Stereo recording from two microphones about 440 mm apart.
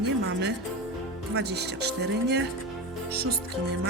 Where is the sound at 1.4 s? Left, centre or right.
Right.